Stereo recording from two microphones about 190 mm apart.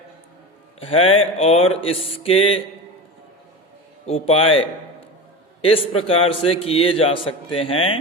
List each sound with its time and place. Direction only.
0.8 s a man's voice: 30° left (ahead or behind)
4.0 s a man's voice: 30° left (ahead or behind)